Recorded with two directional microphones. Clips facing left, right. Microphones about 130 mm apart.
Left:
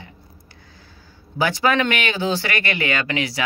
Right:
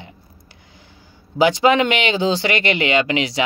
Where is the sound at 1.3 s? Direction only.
20° right (ahead or behind).